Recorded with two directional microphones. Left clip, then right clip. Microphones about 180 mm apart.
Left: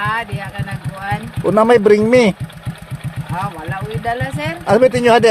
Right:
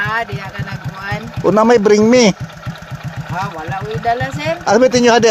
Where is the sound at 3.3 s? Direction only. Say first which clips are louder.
Right 2 dB; centre (ahead or behind).